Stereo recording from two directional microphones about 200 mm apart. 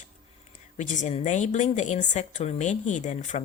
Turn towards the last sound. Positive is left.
turn(degrees=35)  # may be behind; listen again after turning